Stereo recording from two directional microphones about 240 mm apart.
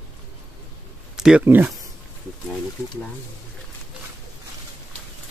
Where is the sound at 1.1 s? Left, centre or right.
Centre.